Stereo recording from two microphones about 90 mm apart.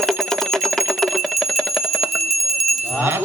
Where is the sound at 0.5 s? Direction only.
Centre (ahead or behind).